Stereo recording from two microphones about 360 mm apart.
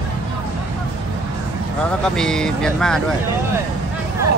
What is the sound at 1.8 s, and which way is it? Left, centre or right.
Speech, centre.